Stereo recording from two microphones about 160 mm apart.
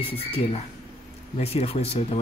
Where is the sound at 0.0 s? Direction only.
35° left (ahead or behind).